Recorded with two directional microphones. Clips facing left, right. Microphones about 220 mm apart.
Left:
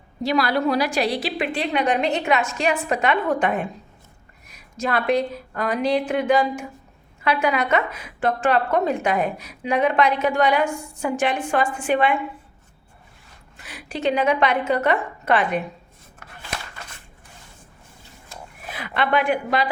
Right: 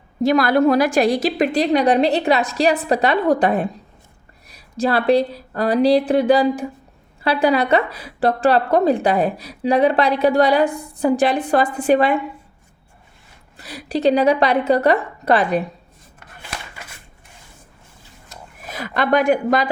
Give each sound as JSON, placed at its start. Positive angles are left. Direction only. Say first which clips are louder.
{"t": 0.2, "sound": "a woman's voice", "louder": "right 6 dB", "side_deg": -50}
{"t": 13.6, "sound": "a woman's voice", "louder": "right 7 dB", "side_deg": -35}
{"t": 18.7, "sound": "a woman's voice", "louder": "right 4 dB", "side_deg": -40}